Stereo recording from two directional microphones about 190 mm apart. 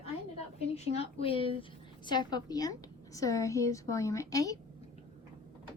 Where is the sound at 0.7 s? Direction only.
35° left (ahead or behind).